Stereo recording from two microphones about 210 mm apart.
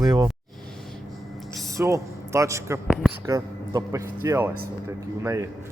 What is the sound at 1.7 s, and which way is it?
A man's voice, 15° right (ahead or behind).